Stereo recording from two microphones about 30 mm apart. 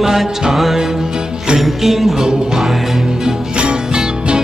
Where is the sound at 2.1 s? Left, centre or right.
Centre.